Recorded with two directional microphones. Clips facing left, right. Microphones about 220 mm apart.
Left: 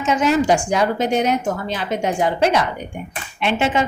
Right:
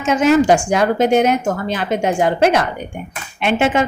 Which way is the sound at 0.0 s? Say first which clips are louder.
Right 4 dB; 50° right (ahead or behind).